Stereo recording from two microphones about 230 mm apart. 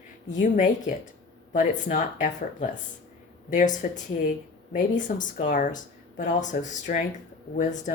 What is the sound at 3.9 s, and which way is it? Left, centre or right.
Speech, left.